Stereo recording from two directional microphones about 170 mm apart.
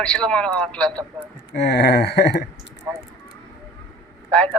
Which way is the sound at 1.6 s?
75° left (ahead or behind).